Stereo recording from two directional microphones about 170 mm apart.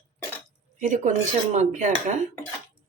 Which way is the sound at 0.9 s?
45° right (ahead or behind).